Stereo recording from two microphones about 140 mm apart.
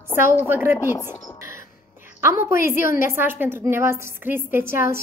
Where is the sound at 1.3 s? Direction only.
20° right (ahead or behind).